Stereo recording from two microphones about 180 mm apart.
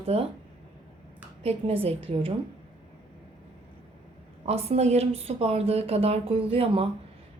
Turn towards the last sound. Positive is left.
turn(degrees=-30)  # may be behind; listen again after turning